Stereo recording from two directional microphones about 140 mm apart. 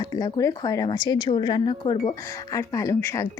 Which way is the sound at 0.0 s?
30° left (ahead or behind).